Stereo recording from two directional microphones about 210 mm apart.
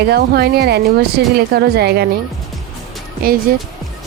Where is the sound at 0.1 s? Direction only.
50° right (ahead or behind).